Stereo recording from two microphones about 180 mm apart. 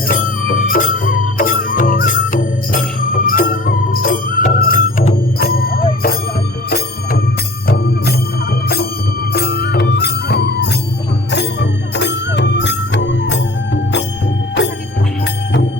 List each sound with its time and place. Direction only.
0.1 s music: 50° left (ahead or behind)
9.3 s music: 65° left (ahead or behind)